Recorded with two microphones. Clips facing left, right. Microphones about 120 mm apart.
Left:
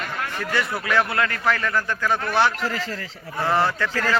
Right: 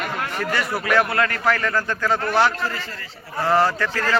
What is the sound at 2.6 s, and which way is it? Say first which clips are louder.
Speech: left 1 dB; 90° left.